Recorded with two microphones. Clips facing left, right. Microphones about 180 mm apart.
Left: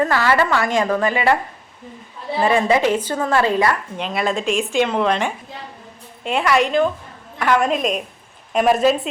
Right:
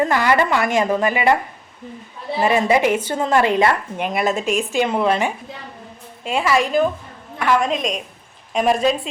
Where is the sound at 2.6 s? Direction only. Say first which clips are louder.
Even; 10° right (ahead or behind).